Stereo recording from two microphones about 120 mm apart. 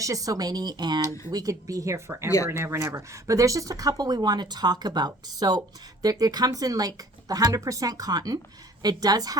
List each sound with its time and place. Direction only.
0.0 s speech: 30° right (ahead or behind)
1.0 s speech: 25° left (ahead or behind)
1.3 s speech: 30° right (ahead or behind)